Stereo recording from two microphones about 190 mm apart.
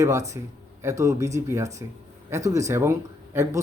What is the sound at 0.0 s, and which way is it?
Speech, 15° right (ahead or behind).